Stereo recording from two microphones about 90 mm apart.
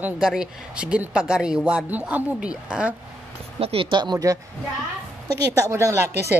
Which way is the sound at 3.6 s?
90° right.